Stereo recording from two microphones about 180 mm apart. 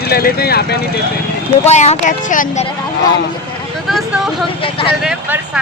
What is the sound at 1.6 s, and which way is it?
Speech, 40° left (ahead or behind).